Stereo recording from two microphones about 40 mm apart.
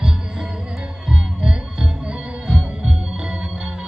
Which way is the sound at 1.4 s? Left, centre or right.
Right.